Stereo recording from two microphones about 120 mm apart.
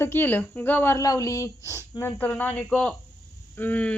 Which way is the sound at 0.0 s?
15° left (ahead or behind).